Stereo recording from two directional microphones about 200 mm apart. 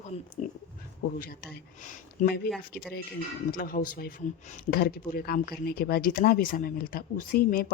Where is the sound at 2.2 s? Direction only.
50° left (ahead or behind).